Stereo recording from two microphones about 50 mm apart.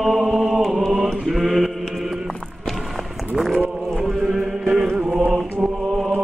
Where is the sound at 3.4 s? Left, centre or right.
Centre.